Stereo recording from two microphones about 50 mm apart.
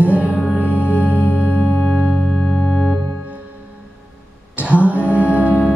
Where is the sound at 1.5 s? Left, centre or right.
Left.